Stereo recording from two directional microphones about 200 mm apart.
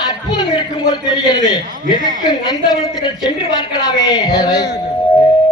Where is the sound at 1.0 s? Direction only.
20° left (ahead or behind).